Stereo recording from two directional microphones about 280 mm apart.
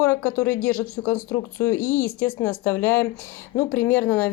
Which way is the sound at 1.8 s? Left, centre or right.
Left.